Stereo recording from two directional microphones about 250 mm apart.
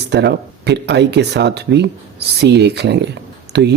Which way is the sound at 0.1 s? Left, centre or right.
Right.